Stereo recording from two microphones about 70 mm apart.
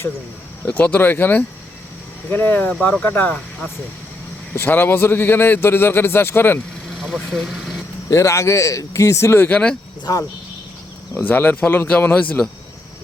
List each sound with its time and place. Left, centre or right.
0.6 s speech: left
4.5 s a man's voice: left
7.0 s speech: centre
8.1 s a man's voice: left
9.5 s speech: centre
11.1 s speech: left